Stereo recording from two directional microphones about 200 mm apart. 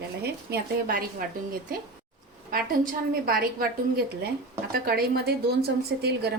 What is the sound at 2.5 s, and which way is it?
A woman's voice, 45° right (ahead or behind).